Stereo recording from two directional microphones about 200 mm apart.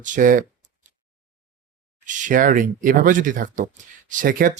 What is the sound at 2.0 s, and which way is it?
Speech, 40° right (ahead or behind).